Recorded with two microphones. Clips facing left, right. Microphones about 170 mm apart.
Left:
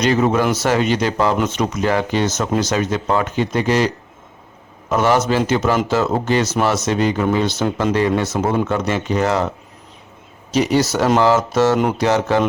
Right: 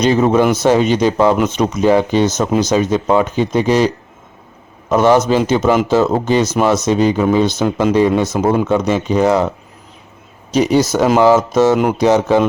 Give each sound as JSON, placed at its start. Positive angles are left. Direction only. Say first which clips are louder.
{"t": 0.0, "sound": "speech", "louder": "right 4 dB", "side_deg": -20}
{"t": 10.5, "sound": "speech", "louder": "right 3 dB", "side_deg": -15}